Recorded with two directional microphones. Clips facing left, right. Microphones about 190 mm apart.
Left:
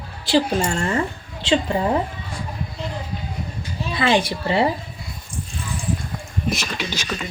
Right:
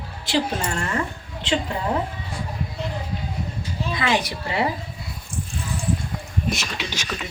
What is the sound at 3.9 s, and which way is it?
Speech, 30° left (ahead or behind).